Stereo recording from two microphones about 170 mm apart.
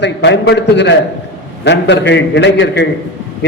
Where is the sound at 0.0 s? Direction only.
90° left.